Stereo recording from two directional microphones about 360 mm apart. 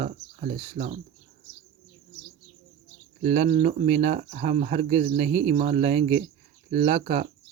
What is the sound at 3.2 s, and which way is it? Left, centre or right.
Speech, centre.